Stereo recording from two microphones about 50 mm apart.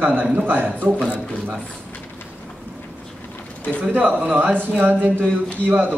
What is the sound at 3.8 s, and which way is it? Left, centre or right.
A man's voice, right.